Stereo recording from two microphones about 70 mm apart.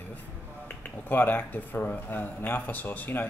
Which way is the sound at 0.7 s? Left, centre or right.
Left.